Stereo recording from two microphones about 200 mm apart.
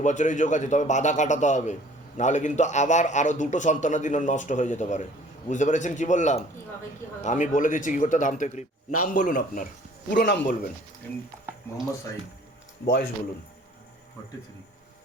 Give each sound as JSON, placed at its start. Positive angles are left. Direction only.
{"t": 0.0, "sound": "a man's voice", "side_deg": 35}
{"t": 12.8, "sound": "speech", "side_deg": 50}